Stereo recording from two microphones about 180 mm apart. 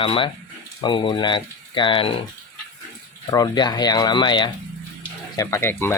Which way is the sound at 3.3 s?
20° left (ahead or behind).